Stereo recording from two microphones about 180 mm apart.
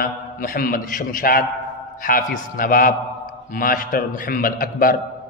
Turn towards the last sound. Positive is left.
turn(degrees=55)  # may be behind; listen again after turning